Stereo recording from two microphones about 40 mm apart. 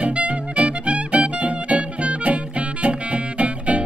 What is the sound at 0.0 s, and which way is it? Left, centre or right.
Music, right.